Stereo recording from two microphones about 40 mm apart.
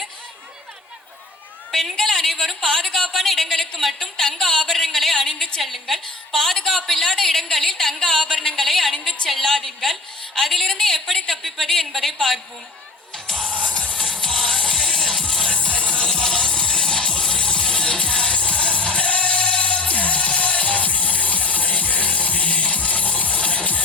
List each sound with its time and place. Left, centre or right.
1.7 s a woman's voice: centre
4.0 s a woman's voice: centre
13.2 s music: centre
13.5 s music: right
13.7 s music: left
15.5 s music: left